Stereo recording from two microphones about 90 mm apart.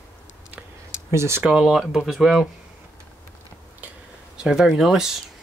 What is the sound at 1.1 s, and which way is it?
Speech, 30° right (ahead or behind).